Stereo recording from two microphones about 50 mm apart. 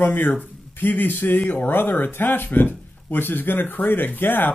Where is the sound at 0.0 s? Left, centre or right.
Left.